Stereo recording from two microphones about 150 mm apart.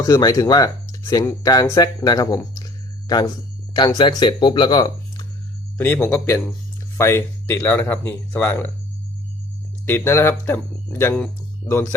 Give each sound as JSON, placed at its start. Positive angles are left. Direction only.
{"t": 0.0, "sound": "speech", "side_deg": 25}
{"t": 5.7, "sound": "speech", "side_deg": 15}
{"t": 9.8, "sound": "speech", "side_deg": 15}